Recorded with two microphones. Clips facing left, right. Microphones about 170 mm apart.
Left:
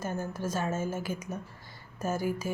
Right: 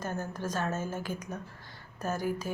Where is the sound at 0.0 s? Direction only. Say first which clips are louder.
Left 1 dB; 10° left (ahead or behind).